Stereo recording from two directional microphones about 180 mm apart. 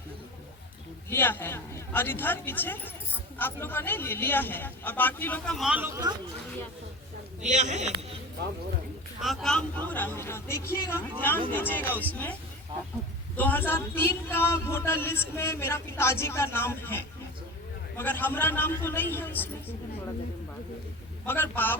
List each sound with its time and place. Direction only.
1.1 s a man's voice: 10° left (ahead or behind); by 5.9 s 5° right (ahead or behind)
7.4 s speech: 40° right (ahead or behind)
9.2 s a man's voice: centre (ahead or behind)
21.2 s a man's voice: 10° left (ahead or behind)